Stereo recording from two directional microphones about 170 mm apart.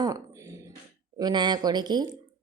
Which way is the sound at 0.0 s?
20° right (ahead or behind).